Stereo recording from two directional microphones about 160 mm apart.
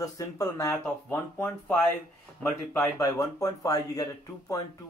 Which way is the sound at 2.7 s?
20° left (ahead or behind).